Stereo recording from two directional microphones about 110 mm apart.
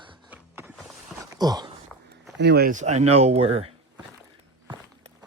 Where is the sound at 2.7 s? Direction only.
90° right; by 3.7 s 65° right (ahead or behind).